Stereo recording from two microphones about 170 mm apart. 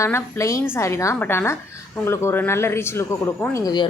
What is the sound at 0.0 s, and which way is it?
A woman's voice, 15° left (ahead or behind).